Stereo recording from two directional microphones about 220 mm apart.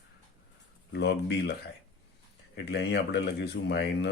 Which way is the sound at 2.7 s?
50° left (ahead or behind).